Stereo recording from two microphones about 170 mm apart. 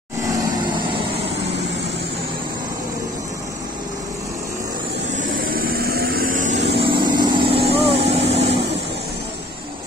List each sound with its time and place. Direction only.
0.7 s vehicle: 30° right (ahead or behind)
5.1 s vehicle: 60° right (ahead or behind)
6.6 s vehicle: 35° right (ahead or behind)